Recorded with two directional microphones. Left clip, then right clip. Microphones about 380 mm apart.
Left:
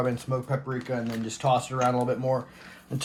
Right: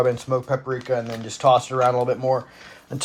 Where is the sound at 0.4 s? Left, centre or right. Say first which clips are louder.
Right 7 dB; right.